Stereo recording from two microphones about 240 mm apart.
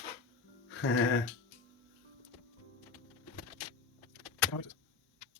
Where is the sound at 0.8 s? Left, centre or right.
Left.